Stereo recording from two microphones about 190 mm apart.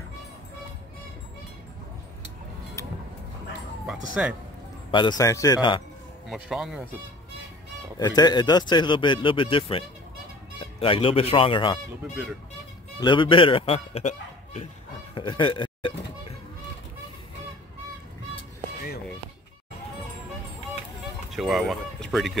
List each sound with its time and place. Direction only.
3.8 s speech: 5° right (ahead or behind)
4.9 s speech: 20° left (ahead or behind)
6.3 s speech: 5° right (ahead or behind)
8.0 s speech: 20° left (ahead or behind)
13.0 s speech: 25° left (ahead or behind)
15.1 s a sound: 25° left (ahead or behind)
21.3 s speech: centre (ahead or behind)